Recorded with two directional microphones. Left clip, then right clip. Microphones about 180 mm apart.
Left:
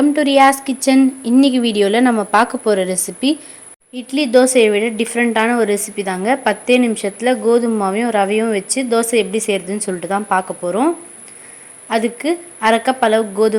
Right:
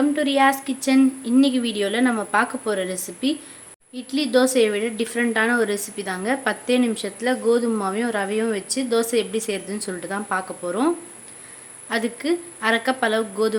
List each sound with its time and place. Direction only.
0.0 s a woman's voice: 30° left (ahead or behind)